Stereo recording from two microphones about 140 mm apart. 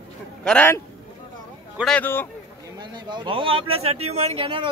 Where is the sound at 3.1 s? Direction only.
40° right (ahead or behind).